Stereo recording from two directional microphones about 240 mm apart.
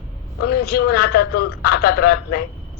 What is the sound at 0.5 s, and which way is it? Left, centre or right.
A man's voice, left.